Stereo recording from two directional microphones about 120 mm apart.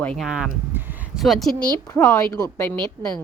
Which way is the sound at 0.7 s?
15° right (ahead or behind).